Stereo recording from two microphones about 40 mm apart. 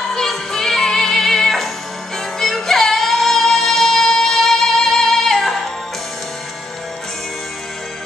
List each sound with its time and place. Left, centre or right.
0.1 s music: centre